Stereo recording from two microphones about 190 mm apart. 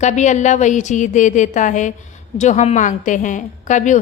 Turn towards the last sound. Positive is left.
turn(degrees=40)  # may be behind; listen again after turning